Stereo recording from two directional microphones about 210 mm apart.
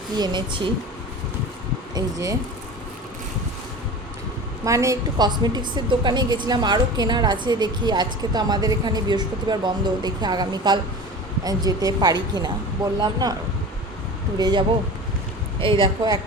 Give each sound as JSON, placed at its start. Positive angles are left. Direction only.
{"t": 0.2, "sound": "a woman's voice", "side_deg": -20}
{"t": 2.0, "sound": "speech", "side_deg": -15}
{"t": 4.6, "sound": "a woman's voice", "side_deg": -15}
{"t": 14.3, "sound": "a woman's voice", "side_deg": -20}
{"t": 15.6, "sound": "a woman's voice", "side_deg": -25}